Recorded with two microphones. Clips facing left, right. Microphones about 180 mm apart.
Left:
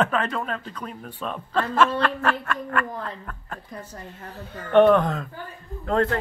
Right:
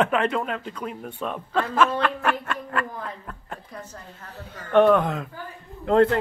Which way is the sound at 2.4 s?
25° right (ahead or behind).